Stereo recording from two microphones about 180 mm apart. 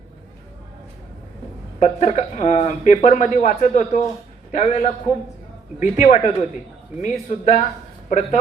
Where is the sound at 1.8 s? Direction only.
40° left (ahead or behind).